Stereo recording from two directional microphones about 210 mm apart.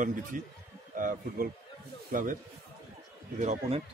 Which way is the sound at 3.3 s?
35° right (ahead or behind).